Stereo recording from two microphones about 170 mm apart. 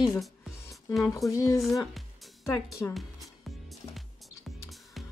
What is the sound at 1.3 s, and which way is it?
Speech, 20° left (ahead or behind).